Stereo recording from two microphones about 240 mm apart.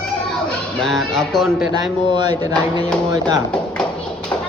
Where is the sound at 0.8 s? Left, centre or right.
Centre.